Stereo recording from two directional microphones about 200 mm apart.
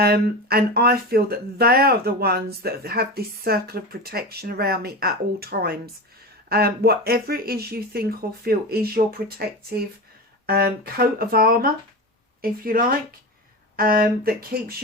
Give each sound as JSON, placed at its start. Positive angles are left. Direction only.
{"t": 0.0, "sound": "speech", "side_deg": -50}
{"t": 10.4, "sound": "speech", "side_deg": -50}